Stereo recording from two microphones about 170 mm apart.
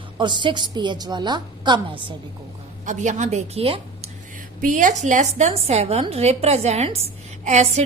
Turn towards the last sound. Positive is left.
turn(degrees=-40)  # may be behind; listen again after turning